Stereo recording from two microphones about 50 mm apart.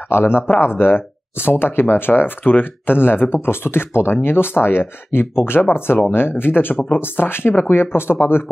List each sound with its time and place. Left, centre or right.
0.1 s speech: left